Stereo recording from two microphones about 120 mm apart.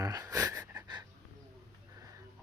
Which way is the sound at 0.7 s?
35° right (ahead or behind).